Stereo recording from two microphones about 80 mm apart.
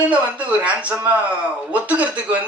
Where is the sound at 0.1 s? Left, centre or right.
Centre.